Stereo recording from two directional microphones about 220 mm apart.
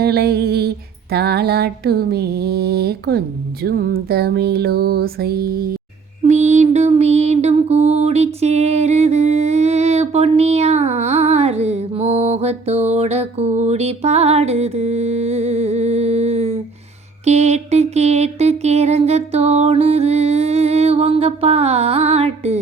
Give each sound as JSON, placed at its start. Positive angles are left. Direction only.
{"t": 0.0, "sound": "music", "side_deg": -45}
{"t": 6.2, "sound": "music", "side_deg": -30}